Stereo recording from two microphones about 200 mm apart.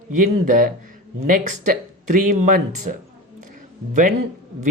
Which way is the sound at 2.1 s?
40° right (ahead or behind).